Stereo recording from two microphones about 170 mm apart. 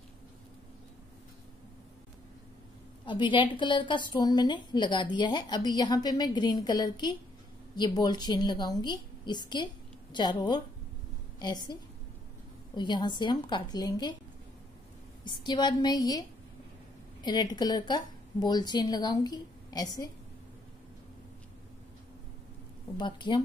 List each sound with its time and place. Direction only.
3.1 s a woman's voice: 30° left (ahead or behind)
12.7 s a woman's voice: 25° left (ahead or behind)
15.2 s a woman's voice: 25° left (ahead or behind)
22.9 s a woman's voice: 25° left (ahead or behind)